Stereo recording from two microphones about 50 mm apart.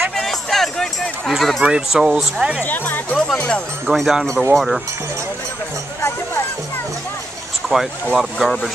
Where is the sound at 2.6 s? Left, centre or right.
Left.